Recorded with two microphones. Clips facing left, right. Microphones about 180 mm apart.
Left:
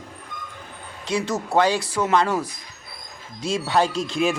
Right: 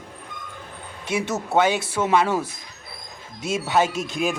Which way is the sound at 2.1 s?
10° right (ahead or behind).